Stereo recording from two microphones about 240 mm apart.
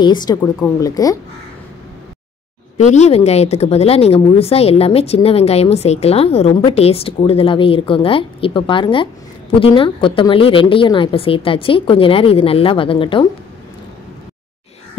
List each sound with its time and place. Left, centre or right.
0.0 s speech: centre
2.8 s speech: left